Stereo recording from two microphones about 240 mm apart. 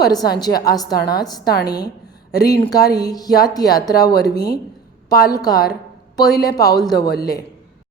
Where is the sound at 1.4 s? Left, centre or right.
Left.